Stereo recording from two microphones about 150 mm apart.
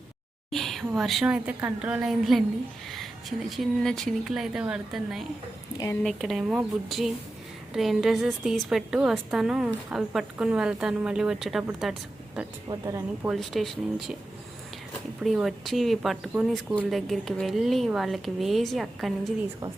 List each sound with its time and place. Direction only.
0.5 s a woman's voice: centre (ahead or behind)
5.7 s speech: 20° left (ahead or behind)
6.0 s a woman's voice: centre (ahead or behind)
12.6 s speech: 20° right (ahead or behind)
13.2 s a woman's voice: centre (ahead or behind)
15.2 s a woman's voice: centre (ahead or behind)